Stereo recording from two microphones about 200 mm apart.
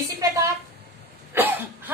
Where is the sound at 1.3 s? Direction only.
10° right (ahead or behind).